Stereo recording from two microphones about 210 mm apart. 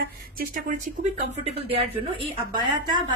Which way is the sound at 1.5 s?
25° right (ahead or behind).